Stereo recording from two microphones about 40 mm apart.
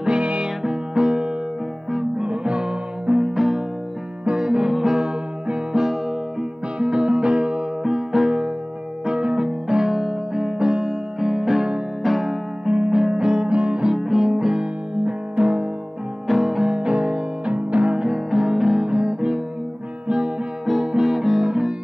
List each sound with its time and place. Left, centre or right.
0.2 s music: right
0.6 s music: centre
4.2 s music: right
6.8 s music: right
9.0 s music: centre
12.6 s music: centre
13.9 s music: centre
14.5 s music: right
16.3 s music: centre
16.6 s music: right
18.0 s music: centre
20.8 s music: centre
21.5 s guitar: centre